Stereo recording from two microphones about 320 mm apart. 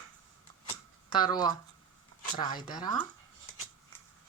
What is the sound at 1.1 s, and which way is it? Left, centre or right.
Speech, centre.